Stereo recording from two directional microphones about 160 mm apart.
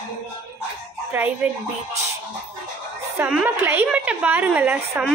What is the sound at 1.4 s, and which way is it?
Speech, 5° right (ahead or behind).